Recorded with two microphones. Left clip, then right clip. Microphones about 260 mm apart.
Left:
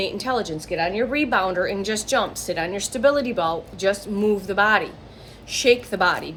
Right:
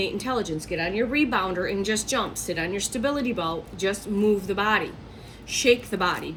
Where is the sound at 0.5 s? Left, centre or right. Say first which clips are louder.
Left 3 dB; centre.